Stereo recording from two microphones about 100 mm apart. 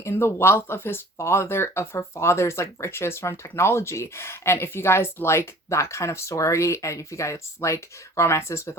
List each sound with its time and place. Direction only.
0.0 s speech: 25° left (ahead or behind)